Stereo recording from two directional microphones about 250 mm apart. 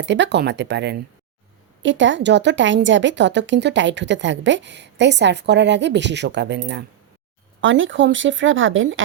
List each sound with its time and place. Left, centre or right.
0.0 s a woman's voice: right